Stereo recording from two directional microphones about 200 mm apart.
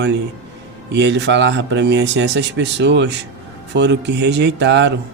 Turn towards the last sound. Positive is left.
turn(degrees=-60)  # may be behind; listen again after turning